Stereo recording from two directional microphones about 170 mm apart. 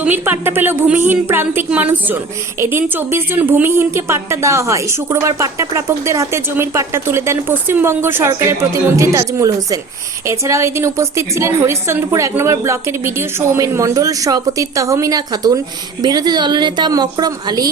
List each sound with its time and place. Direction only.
0.0 s a woman's voice: 10° right (ahead or behind)